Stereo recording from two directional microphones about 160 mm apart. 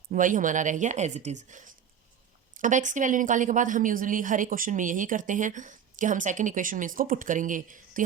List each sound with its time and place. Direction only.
0.1 s a woman's voice: 55° right (ahead or behind)